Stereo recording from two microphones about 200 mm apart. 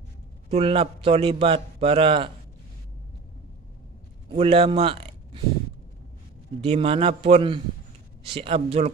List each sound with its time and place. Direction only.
0.5 s a man's voice: 30° right (ahead or behind)
4.3 s speech: 30° right (ahead or behind)
6.6 s a man's voice: 30° right (ahead or behind)